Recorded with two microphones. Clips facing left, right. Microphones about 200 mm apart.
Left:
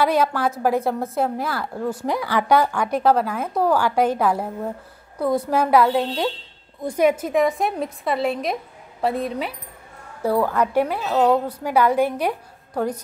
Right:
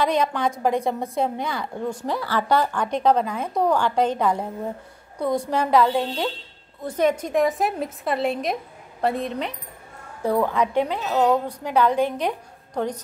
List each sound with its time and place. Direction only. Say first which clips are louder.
0.0 s a woman's voice: left 2 dB; 5° left (ahead or behind)